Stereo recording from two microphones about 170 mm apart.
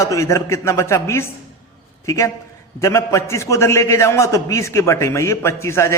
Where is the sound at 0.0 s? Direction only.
15° left (ahead or behind).